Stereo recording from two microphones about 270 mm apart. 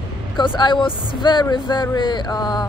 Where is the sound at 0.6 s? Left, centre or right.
Centre.